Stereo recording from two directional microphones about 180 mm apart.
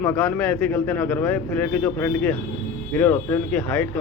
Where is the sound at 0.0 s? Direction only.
10° left (ahead or behind).